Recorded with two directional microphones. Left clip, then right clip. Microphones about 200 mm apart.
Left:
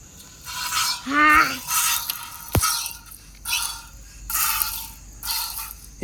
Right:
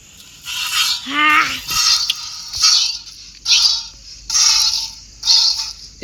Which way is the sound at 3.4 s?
5° left (ahead or behind).